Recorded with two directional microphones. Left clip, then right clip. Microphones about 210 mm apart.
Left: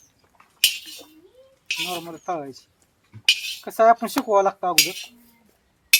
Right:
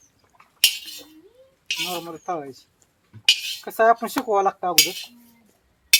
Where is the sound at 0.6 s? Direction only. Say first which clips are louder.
Right 1 dB; 5° right (ahead or behind).